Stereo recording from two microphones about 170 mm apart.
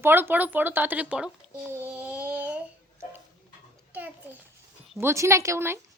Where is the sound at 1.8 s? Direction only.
10° right (ahead or behind).